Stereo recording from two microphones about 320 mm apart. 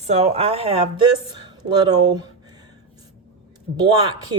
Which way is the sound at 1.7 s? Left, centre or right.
Centre.